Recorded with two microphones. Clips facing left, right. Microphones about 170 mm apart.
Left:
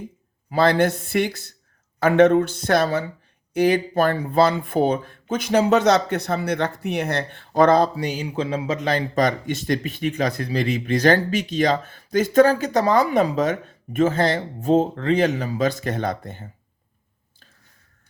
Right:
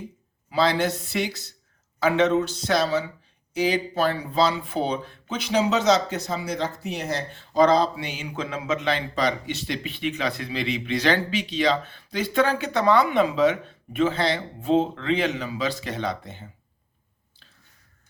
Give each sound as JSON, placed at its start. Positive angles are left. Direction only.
{"t": 0.5, "sound": "speech", "side_deg": 50}